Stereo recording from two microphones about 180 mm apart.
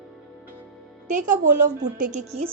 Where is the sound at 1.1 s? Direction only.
45° right (ahead or behind).